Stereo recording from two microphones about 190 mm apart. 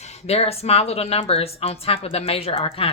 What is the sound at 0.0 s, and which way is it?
Speech, 30° left (ahead or behind).